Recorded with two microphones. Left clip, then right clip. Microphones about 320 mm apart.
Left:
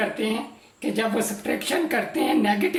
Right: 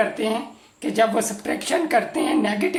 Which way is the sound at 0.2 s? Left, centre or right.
Centre.